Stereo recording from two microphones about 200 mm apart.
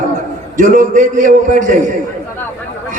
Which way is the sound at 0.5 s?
40° right (ahead or behind).